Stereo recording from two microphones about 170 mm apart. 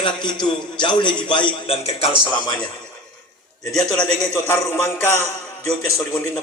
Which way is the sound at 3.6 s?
5° left (ahead or behind).